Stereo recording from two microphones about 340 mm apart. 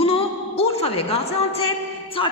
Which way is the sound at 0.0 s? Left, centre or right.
Centre.